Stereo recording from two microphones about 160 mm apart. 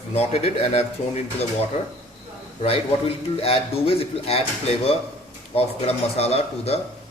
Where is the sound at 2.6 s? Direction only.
40° left (ahead or behind).